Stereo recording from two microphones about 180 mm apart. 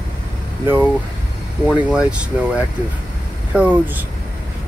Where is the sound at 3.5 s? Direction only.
5° right (ahead or behind).